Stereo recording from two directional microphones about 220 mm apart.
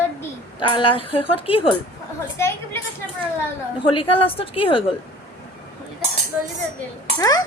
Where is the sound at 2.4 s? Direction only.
10° left (ahead or behind).